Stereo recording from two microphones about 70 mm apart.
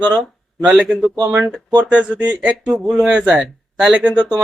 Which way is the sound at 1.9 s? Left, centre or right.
Centre.